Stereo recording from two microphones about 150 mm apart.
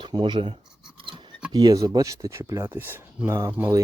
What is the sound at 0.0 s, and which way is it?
Speech, 30° right (ahead or behind).